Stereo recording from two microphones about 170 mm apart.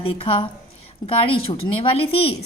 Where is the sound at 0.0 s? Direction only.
30° left (ahead or behind).